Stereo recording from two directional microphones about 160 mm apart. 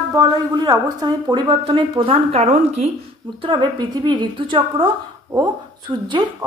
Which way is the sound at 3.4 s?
30° right (ahead or behind).